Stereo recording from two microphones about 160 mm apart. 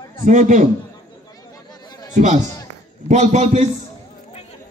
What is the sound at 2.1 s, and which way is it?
A man's voice, 50° right (ahead or behind).